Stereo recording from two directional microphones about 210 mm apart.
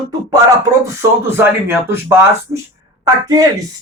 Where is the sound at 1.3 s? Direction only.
10° right (ahead or behind).